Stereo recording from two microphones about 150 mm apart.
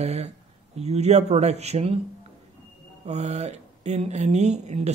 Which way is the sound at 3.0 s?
50° right (ahead or behind).